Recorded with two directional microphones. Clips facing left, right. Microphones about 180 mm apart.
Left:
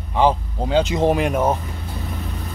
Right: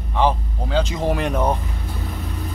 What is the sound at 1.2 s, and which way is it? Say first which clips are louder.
Speech: left 2 dB; 10° left (ahead or behind).